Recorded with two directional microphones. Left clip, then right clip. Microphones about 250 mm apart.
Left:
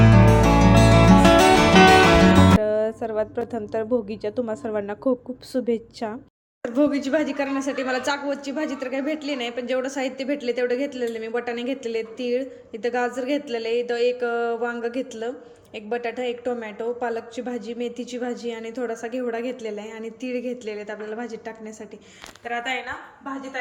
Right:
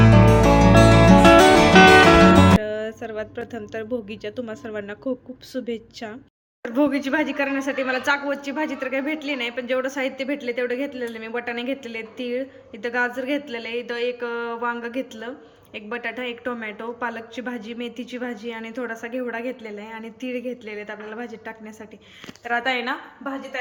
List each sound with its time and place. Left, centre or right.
0.0 s music: centre
4.6 s a man's voice: centre
15.7 s a man's voice: centre
22.4 s speech: centre